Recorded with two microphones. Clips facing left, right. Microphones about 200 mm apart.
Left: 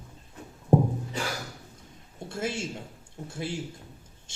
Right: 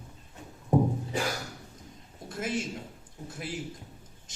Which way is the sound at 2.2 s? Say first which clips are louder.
Even; 25° left (ahead or behind).